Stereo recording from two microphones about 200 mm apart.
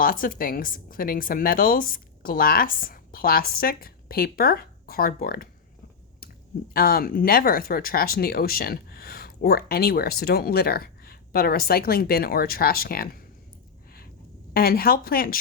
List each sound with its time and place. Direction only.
0.0 s speech: 45° left (ahead or behind)
6.7 s speech: 50° left (ahead or behind)
14.5 s speech: 50° left (ahead or behind)